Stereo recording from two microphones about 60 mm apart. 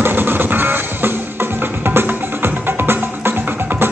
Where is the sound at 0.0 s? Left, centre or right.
Right.